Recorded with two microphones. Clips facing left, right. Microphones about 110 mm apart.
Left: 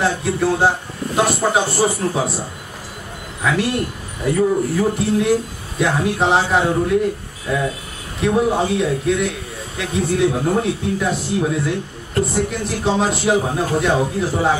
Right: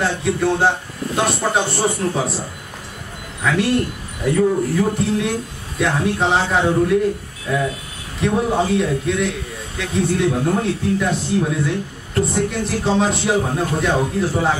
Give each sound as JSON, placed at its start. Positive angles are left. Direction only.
{"t": 0.0, "sound": "a man's voice", "side_deg": 0}
{"t": 3.4, "sound": "a man's voice", "side_deg": 0}
{"t": 8.2, "sound": "a man's voice", "side_deg": 0}